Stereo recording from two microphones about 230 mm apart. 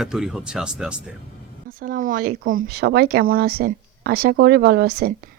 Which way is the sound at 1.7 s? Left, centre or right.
Right.